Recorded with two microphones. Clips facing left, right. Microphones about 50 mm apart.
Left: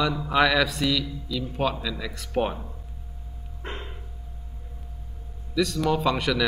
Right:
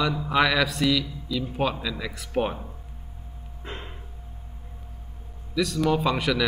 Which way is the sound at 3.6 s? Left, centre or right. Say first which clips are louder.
Left 2 dB; left.